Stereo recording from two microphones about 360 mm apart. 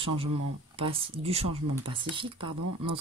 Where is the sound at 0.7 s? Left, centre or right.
Centre.